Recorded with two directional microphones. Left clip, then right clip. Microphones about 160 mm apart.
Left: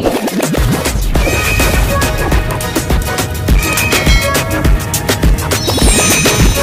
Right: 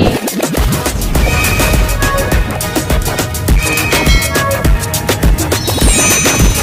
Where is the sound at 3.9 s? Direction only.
Centre (ahead or behind).